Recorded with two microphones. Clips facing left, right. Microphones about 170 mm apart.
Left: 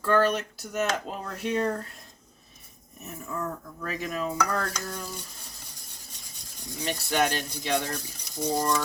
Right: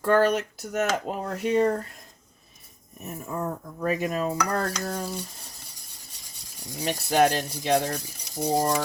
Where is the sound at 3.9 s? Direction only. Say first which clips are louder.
Right 3 dB; 45° right (ahead or behind).